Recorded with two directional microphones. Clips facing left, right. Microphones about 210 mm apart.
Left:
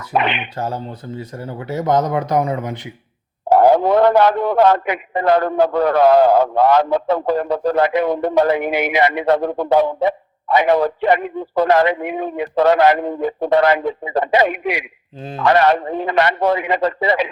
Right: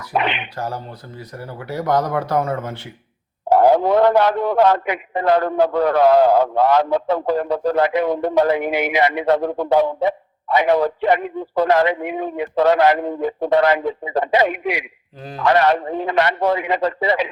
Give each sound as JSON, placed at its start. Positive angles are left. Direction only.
{"t": 0.0, "sound": "speech", "side_deg": 55}
{"t": 0.5, "sound": "speech", "side_deg": 25}
{"t": 3.5, "sound": "a man's voice", "side_deg": 55}
{"t": 15.2, "sound": "speech", "side_deg": 25}
{"t": 15.4, "sound": "a man's voice", "side_deg": 75}